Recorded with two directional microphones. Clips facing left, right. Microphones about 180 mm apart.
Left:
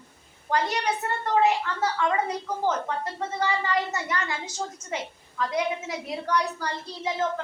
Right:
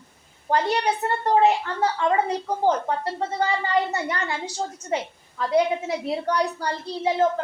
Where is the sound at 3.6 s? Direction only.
30° right (ahead or behind).